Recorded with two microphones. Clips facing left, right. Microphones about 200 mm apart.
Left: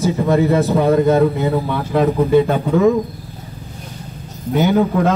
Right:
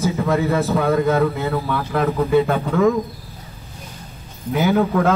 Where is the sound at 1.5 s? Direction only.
30° left (ahead or behind).